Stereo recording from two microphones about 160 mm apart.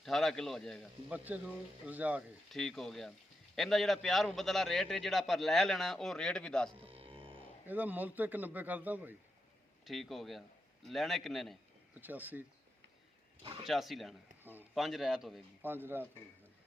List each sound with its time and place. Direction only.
0.0 s a man's voice: centre (ahead or behind)
1.1 s speech: 10° right (ahead or behind)
2.5 s a man's voice: 5° left (ahead or behind)
6.8 s music: 35° right (ahead or behind)
7.7 s speech: 10° right (ahead or behind)
9.8 s a man's voice: centre (ahead or behind)
11.9 s speech: 10° right (ahead or behind)
13.4 s speech: 30° right (ahead or behind)
13.7 s a man's voice: centre (ahead or behind)
15.6 s speech: 15° right (ahead or behind)